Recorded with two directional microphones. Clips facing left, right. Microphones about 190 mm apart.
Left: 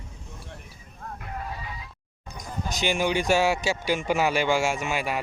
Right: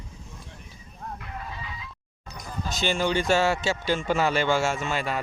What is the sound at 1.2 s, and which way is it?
Music, 40° left (ahead or behind).